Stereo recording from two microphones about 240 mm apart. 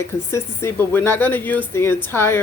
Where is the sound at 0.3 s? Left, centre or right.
Centre.